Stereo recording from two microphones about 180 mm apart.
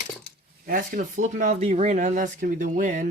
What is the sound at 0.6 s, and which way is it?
Speech, 50° right (ahead or behind).